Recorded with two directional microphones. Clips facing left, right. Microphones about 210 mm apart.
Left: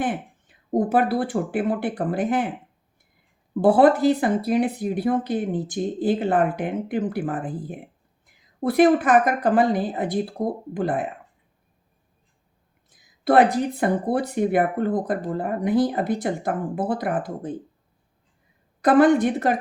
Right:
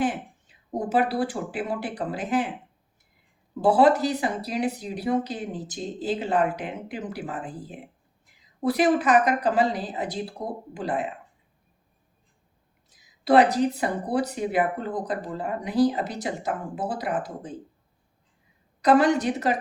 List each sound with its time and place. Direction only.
0.0 s speech: 55° left (ahead or behind)
3.6 s speech: 55° left (ahead or behind)
12.9 s speech: 55° left (ahead or behind)
18.8 s speech: 55° left (ahead or behind)